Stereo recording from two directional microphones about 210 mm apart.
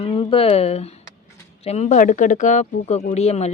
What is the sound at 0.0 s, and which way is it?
Speech, 25° left (ahead or behind).